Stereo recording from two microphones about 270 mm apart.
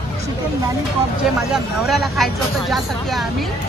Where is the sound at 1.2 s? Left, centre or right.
Centre.